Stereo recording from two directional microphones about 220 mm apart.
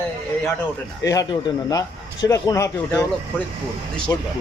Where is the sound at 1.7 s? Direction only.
15° left (ahead or behind).